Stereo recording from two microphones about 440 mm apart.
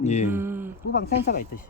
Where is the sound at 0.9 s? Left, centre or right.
Centre.